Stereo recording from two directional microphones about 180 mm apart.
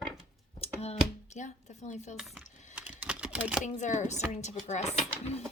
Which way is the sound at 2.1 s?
Centre (ahead or behind).